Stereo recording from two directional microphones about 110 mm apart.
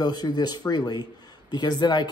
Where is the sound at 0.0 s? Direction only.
40° left (ahead or behind).